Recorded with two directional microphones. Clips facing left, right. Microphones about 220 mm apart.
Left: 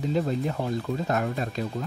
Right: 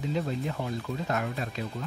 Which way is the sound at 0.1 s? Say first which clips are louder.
Left 5 dB; 40° left (ahead or behind).